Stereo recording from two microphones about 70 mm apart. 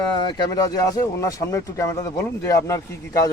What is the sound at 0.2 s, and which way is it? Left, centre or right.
Speech, left.